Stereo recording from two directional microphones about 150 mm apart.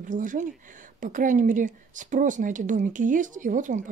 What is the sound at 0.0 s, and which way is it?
Speech, 60° right (ahead or behind).